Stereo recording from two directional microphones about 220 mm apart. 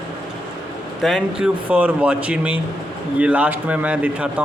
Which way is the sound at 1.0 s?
Centre (ahead or behind).